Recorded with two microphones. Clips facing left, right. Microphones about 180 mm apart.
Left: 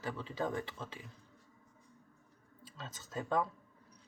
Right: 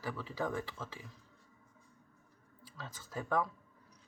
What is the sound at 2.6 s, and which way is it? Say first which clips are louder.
Speech: even; 25° left (ahead or behind).